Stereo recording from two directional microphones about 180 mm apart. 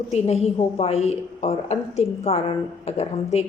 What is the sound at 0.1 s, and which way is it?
A woman's voice, 35° left (ahead or behind).